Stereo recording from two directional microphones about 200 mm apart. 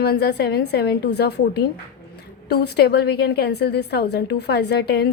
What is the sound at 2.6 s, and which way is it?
A woman's voice, 55° left (ahead or behind).